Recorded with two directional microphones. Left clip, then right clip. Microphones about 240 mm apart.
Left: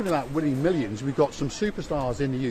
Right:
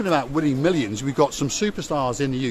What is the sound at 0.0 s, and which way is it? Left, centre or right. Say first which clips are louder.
Speech: right 4 dB; right.